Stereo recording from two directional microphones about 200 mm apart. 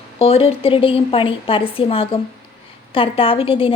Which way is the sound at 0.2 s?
30° left (ahead or behind).